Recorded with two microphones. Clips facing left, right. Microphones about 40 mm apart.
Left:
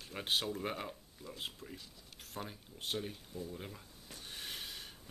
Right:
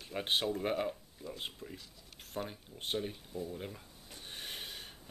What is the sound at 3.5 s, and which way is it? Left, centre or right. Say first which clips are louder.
Speech: right 3 dB; centre.